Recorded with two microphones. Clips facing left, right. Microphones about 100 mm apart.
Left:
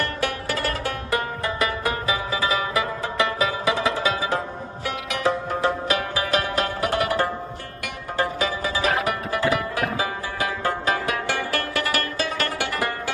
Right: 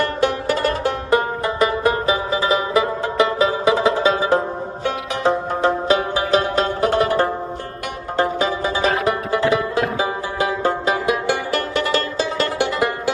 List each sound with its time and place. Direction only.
0.2 s music: 25° right (ahead or behind)
9.8 s music: 20° right (ahead or behind)